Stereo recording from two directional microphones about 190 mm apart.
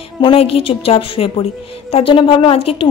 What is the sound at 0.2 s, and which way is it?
A woman's voice, 30° left (ahead or behind).